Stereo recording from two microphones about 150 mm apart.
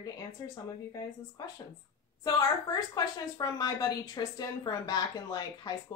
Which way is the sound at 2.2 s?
25° left (ahead or behind).